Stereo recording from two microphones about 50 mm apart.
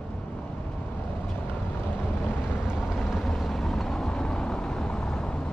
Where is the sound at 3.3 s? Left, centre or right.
Centre.